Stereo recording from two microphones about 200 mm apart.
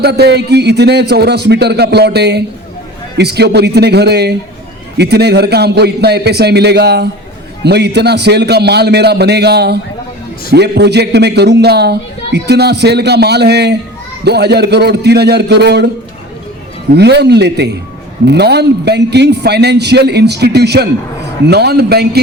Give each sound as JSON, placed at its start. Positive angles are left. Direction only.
{"t": 0.0, "sound": "a man's voice", "side_deg": -55}
{"t": 16.9, "sound": "a man's voice", "side_deg": -55}